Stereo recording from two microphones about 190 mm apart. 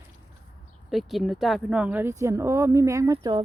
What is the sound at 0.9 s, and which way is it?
Speech, centre (ahead or behind).